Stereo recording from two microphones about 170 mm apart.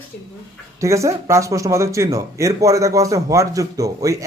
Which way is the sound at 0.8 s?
20° right (ahead or behind).